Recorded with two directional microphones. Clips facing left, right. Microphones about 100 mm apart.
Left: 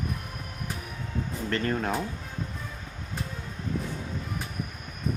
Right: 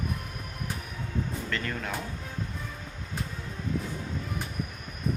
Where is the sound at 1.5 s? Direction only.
35° left (ahead or behind).